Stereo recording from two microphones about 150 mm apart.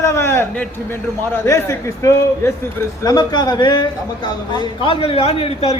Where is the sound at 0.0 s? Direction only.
20° left (ahead or behind).